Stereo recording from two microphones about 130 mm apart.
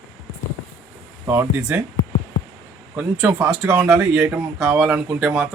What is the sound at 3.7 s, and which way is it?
Speech, 20° right (ahead or behind).